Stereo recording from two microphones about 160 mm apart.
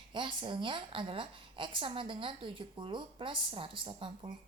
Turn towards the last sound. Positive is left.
turn(degrees=-30)  # may be behind; listen again after turning